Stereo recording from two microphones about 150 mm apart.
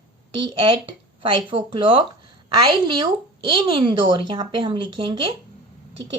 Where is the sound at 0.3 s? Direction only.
30° right (ahead or behind).